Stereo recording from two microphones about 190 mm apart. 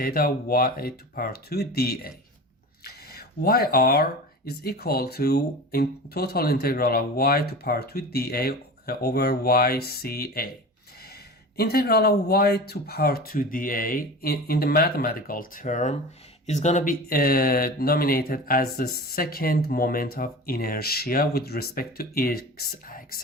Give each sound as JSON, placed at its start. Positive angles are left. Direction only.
{"t": 0.0, "sound": "speech", "side_deg": 50}
{"t": 11.5, "sound": "speech", "side_deg": 55}